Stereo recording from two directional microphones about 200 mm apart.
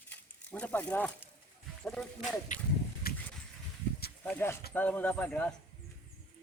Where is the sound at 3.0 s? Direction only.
50° left (ahead or behind).